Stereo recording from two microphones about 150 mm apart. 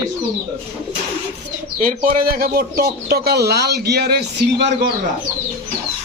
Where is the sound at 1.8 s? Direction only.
65° right (ahead or behind); by 4.2 s 90° right.